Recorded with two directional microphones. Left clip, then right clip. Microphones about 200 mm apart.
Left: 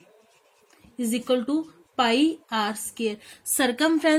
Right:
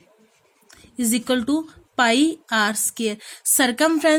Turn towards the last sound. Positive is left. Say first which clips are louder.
# right 4 dB
turn(degrees=-35)  # may be behind; listen again after turning